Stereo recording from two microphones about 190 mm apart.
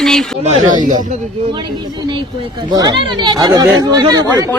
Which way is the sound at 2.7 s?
25° right (ahead or behind).